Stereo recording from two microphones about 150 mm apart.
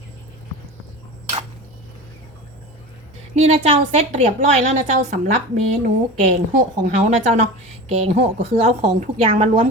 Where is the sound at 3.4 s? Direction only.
45° right (ahead or behind).